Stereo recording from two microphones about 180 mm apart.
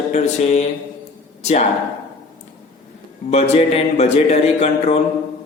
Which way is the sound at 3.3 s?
35° left (ahead or behind).